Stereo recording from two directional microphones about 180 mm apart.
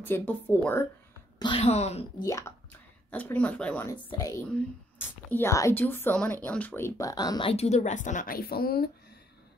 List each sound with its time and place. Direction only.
0.0 s speech: 10° left (ahead or behind)
1.4 s speech: 30° left (ahead or behind)
2.1 s speech: 15° left (ahead or behind)
3.9 s a woman's voice: 20° left (ahead or behind); by 8.9 s 60° left (ahead or behind)